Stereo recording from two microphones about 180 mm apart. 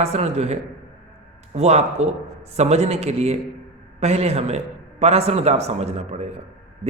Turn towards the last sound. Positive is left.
turn(degrees=-35)  # may be behind; listen again after turning